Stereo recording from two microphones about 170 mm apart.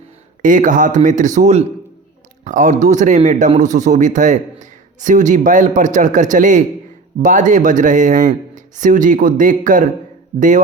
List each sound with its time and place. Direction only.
0.4 s speech: 50° right (ahead or behind)